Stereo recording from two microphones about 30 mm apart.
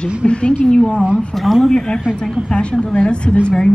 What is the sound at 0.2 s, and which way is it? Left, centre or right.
Speech, left.